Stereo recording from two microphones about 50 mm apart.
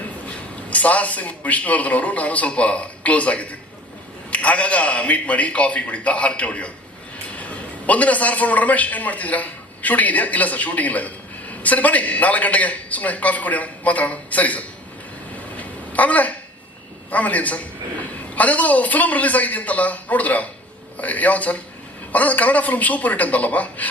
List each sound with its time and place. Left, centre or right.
0.3 s a man's voice: left
15.5 s a sound: left
17.1 s a man's voice: left